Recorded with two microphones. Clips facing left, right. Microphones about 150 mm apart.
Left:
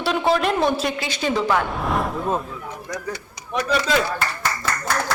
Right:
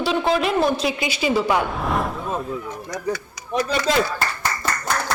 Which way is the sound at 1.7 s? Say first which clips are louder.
Even; centre (ahead or behind).